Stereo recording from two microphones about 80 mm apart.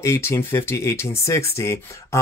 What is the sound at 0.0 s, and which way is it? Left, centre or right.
Speech, left.